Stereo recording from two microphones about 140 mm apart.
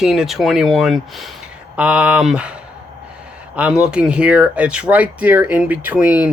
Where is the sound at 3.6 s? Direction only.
5° right (ahead or behind).